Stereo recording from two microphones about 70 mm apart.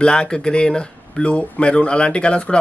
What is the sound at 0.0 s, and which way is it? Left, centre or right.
Speech, centre.